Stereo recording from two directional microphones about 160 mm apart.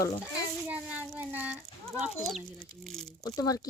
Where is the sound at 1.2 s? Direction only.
10° right (ahead or behind).